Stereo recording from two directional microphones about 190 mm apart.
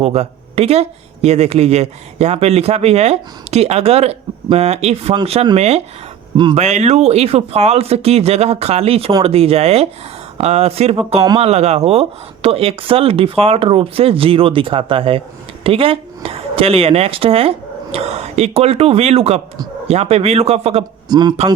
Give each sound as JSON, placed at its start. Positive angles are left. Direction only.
{"t": 0.0, "sound": "speech", "side_deg": -35}
{"t": 6.6, "sound": "speech", "side_deg": -35}
{"t": 21.1, "sound": "speech", "side_deg": -20}